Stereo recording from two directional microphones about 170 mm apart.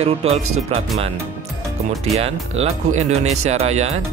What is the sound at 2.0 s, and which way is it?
Speech, 35° right (ahead or behind).